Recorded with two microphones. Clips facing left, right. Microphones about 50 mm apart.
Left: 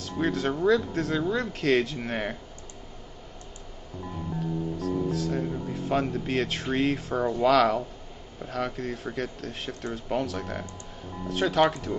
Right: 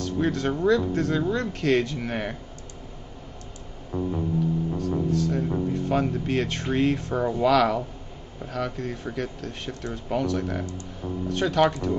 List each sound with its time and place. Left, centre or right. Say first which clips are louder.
0.0 s speech: right 2 dB; centre
3.9 s music: right 11 dB; right
4.7 s music: right 3 dB; centre
5.7 s speech: even; centre